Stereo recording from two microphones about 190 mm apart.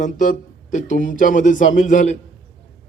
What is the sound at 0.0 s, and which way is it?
A man's voice, 40° left (ahead or behind).